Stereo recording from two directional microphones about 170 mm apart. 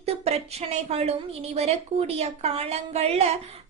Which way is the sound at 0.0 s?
40° right (ahead or behind).